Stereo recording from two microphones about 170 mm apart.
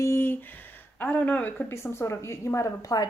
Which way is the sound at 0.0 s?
15° left (ahead or behind).